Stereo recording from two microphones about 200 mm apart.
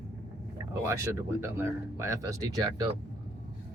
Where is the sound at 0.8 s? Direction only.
15° right (ahead or behind).